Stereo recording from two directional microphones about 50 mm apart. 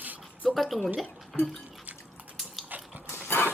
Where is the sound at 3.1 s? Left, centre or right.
Left.